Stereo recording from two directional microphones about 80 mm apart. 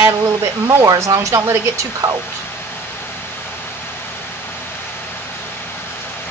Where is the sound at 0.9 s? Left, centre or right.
Right.